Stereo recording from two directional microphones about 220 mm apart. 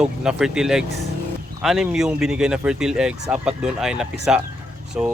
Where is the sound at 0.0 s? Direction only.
5° right (ahead or behind).